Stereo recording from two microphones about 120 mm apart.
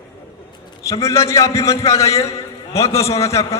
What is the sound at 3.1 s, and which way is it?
Speech, 60° left (ahead or behind).